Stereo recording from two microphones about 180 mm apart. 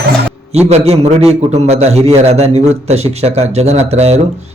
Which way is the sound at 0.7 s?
35° right (ahead or behind).